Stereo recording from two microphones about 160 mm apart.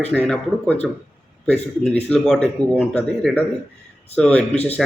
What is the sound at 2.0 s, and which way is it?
A man's voice, 5° left (ahead or behind).